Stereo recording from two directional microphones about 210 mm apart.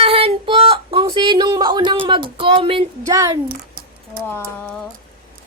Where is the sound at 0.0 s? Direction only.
25° right (ahead or behind).